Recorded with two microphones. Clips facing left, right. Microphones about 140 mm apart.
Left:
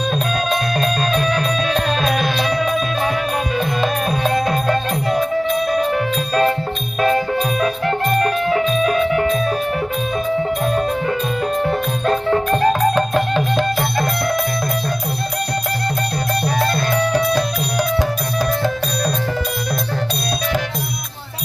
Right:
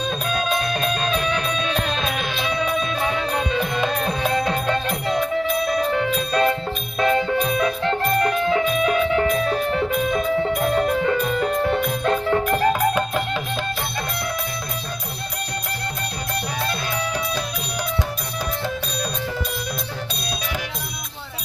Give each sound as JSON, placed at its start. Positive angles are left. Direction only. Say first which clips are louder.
{"t": 0.5, "sound": "music", "louder": "left 3 dB", "side_deg": 35}
{"t": 3.5, "sound": "music", "louder": "left 3 dB", "side_deg": 35}
{"t": 17.1, "sound": "music", "louder": "left 9 dB", "side_deg": 60}